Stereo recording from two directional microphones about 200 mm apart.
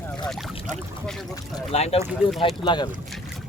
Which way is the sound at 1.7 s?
30° left (ahead or behind).